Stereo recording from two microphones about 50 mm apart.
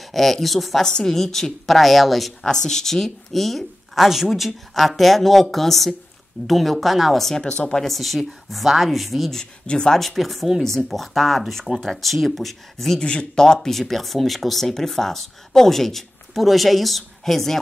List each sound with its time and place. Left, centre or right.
0.0 s speech: centre
7.4 s speech: centre
7.8 s speech: centre
9.4 s speech: centre
9.9 s speech: centre
13.0 s speech: left; by 17.6 s centre